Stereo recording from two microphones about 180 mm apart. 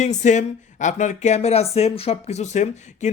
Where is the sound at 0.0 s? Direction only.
40° left (ahead or behind).